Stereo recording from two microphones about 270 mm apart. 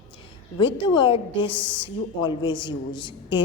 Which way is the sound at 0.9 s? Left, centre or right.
Centre.